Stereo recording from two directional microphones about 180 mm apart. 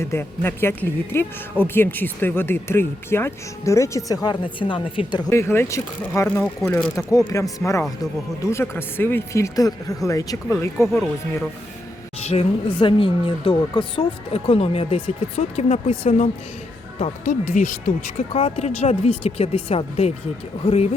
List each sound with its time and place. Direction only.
0.0 s speech: 15° left (ahead or behind)
5.3 s speech: 15° left (ahead or behind)
10.8 s a man's voice: centre (ahead or behind)
12.2 s a woman's voice: 35° left (ahead or behind)
18.3 s a woman's voice: 30° left (ahead or behind)